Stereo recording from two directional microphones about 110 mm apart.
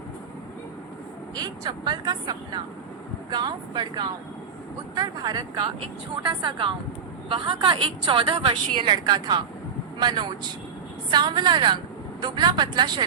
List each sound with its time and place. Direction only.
1.4 s a woman's voice: 40° right (ahead or behind)
6.2 s a woman's voice: 50° right (ahead or behind)